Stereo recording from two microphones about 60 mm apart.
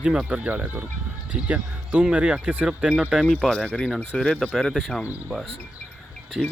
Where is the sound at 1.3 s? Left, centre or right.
Centre.